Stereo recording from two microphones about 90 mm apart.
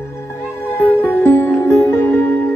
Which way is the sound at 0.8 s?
20° left (ahead or behind).